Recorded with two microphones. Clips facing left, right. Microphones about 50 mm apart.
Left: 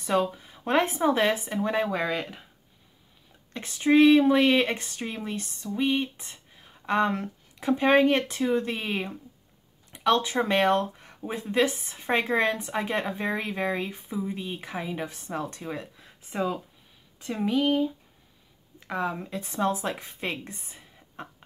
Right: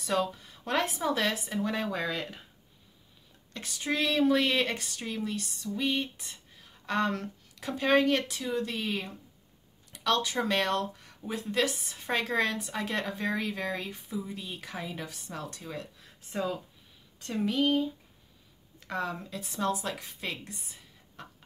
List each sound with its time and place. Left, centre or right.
0.0 s speech: centre
3.5 s speech: left
19.2 s a woman's voice: left